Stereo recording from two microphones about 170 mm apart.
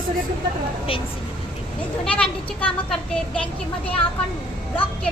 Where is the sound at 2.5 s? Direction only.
5° left (ahead or behind).